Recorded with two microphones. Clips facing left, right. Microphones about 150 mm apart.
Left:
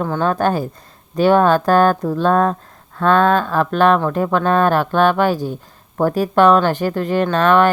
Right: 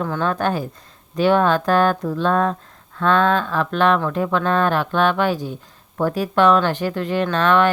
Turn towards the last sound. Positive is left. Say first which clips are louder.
# left 3 dB
turn(degrees=45)  # may be behind; listen again after turning